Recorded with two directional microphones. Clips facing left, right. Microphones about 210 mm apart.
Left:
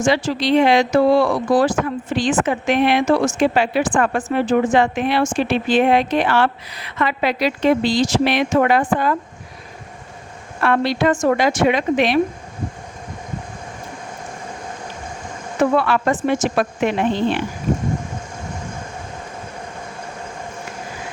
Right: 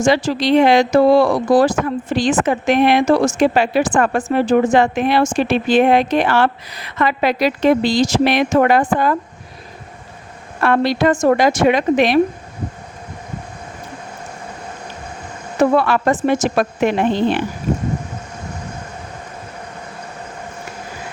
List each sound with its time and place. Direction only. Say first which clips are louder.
0.0 s speech: right 3 dB; 40° right (ahead or behind)
10.6 s speech: right 2 dB; 40° right (ahead or behind)
15.6 s speech: right 3 dB; 40° right (ahead or behind)